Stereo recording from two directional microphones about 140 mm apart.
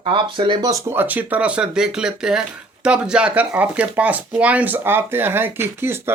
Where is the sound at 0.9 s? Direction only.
15° right (ahead or behind).